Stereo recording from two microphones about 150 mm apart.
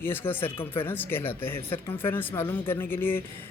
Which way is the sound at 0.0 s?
15° left (ahead or behind).